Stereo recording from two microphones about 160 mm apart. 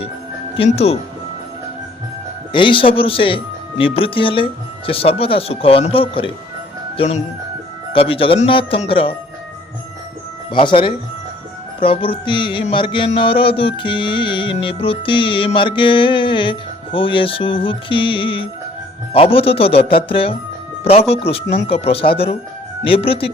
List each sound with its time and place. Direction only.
0.5 s music: 40° left (ahead or behind)
2.5 s music: 30° left (ahead or behind)
6.9 s speech: 35° left (ahead or behind)
7.9 s music: 35° left (ahead or behind)
10.5 s music: 30° left (ahead or behind)